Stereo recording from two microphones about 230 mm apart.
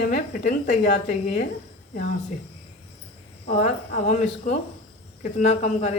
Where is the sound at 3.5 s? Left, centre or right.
Left.